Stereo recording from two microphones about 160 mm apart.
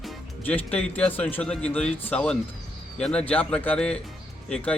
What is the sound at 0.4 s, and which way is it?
A man's voice, 10° left (ahead or behind).